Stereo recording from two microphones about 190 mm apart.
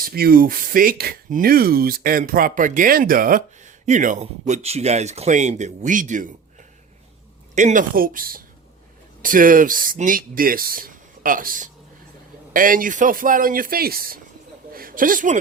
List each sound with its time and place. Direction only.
0.0 s speech: 50° right (ahead or behind)